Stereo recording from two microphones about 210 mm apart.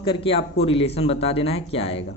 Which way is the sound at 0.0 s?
25° left (ahead or behind).